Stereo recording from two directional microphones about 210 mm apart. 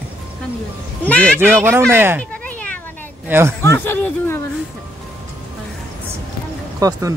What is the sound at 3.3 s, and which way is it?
Speech, 10° right (ahead or behind).